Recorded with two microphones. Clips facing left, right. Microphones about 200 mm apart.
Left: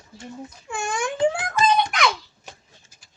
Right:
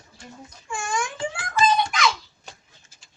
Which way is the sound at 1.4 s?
60° left (ahead or behind).